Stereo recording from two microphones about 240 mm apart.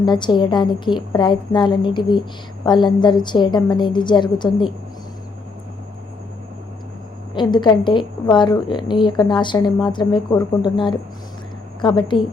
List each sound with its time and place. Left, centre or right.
0.0 s a woman's voice: centre
7.3 s a woman's voice: centre